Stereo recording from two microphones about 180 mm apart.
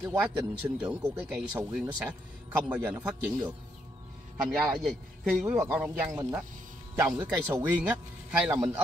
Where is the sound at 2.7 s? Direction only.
10° right (ahead or behind).